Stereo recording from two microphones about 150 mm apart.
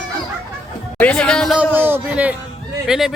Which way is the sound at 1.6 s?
15° right (ahead or behind).